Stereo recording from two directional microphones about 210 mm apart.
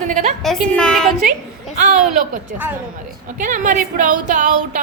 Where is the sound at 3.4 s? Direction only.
40° right (ahead or behind).